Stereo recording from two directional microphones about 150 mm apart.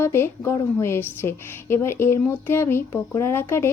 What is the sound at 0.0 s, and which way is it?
Speech, 15° left (ahead or behind).